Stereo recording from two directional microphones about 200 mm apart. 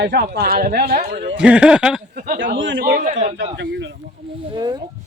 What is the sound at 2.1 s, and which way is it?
Speech, 40° right (ahead or behind).